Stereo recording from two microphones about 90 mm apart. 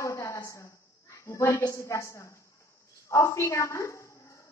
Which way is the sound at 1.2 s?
35° left (ahead or behind).